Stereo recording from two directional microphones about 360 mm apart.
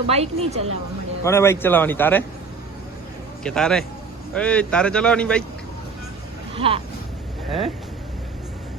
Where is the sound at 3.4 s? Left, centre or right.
Centre.